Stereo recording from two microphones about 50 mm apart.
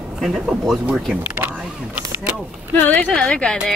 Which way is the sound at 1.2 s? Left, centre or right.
Right.